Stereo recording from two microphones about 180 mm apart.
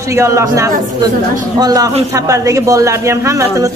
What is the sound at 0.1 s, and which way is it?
A man's voice, 15° right (ahead or behind).